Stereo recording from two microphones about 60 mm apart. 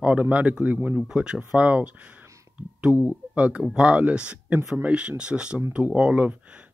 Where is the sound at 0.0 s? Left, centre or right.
Right.